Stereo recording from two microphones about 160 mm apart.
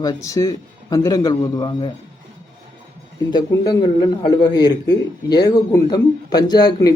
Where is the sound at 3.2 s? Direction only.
25° left (ahead or behind).